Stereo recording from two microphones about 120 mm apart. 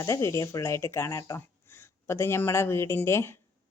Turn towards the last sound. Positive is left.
turn(degrees=20)  # may be behind; listen again after turning